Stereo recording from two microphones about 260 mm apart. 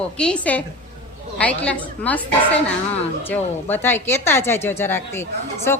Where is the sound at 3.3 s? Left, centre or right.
Centre.